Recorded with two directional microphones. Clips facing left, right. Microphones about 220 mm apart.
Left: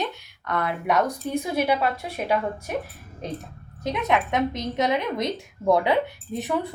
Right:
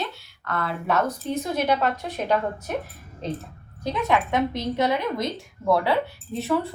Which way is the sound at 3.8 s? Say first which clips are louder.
Even; 20° left (ahead or behind).